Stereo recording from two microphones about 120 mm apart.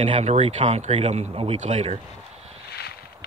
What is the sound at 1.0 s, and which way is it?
Speech, 60° right (ahead or behind).